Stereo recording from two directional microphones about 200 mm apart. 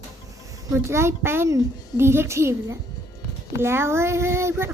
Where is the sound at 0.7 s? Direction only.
15° right (ahead or behind).